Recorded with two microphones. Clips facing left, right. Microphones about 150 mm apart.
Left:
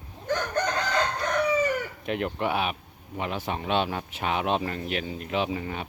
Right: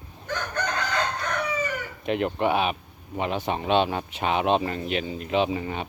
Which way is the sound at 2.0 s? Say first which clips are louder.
Right 5 dB; centre (ahead or behind).